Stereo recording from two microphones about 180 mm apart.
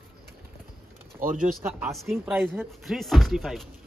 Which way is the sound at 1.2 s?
50° right (ahead or behind).